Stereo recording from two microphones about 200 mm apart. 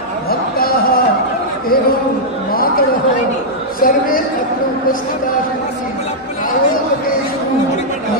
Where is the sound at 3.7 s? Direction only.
45° left (ahead or behind).